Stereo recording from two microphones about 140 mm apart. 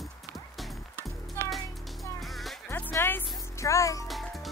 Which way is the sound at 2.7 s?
15° left (ahead or behind).